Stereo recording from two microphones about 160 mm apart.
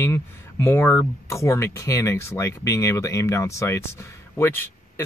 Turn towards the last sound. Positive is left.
turn(degrees=15)  # may be behind; listen again after turning